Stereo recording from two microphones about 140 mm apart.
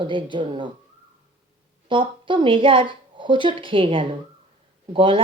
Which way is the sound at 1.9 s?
35° right (ahead or behind).